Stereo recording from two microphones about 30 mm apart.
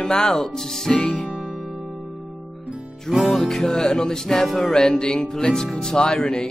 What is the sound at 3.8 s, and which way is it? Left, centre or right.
Speech, left.